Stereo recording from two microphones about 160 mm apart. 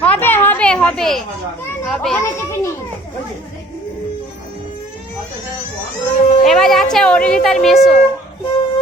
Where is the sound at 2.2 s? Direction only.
15° left (ahead or behind).